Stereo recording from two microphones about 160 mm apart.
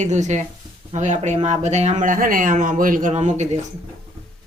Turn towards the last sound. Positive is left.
turn(degrees=-45)  # may be behind; listen again after turning